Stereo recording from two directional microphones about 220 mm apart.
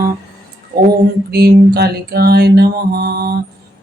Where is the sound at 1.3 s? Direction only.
45° right (ahead or behind).